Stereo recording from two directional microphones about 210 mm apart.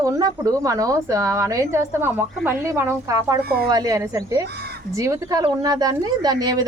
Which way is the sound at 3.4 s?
45° right (ahead or behind).